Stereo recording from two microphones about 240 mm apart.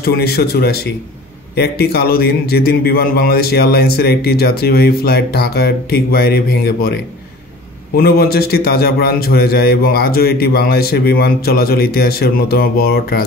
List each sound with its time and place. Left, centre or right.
0.0 s a man's voice: left